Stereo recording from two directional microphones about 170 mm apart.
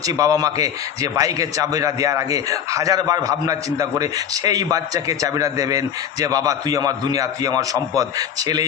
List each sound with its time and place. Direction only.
0.0 s a man's voice: 20° right (ahead or behind)